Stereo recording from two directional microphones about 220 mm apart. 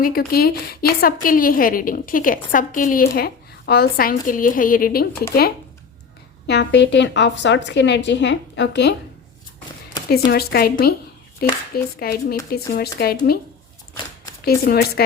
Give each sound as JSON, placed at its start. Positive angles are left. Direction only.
{"t": 0.0, "sound": "a woman's voice", "side_deg": 40}
{"t": 6.5, "sound": "speech", "side_deg": 50}
{"t": 10.1, "sound": "speech", "side_deg": 45}
{"t": 11.4, "sound": "a sound", "side_deg": 45}
{"t": 11.9, "sound": "speech", "side_deg": 45}
{"t": 14.4, "sound": "speech", "side_deg": 45}